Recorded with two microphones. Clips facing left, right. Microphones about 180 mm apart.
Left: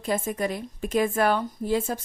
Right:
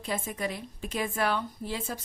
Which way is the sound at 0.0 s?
45° left (ahead or behind).